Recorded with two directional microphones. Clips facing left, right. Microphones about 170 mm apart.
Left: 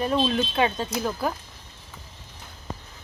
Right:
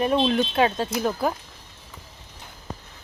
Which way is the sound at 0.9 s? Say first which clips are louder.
Right 3 dB; 15° right (ahead or behind).